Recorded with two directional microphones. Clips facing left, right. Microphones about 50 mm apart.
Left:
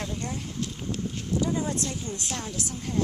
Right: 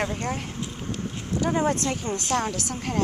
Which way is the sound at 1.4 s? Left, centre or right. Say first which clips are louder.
Right 5 dB; right.